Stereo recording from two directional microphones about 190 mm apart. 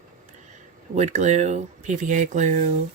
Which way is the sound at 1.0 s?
40° right (ahead or behind).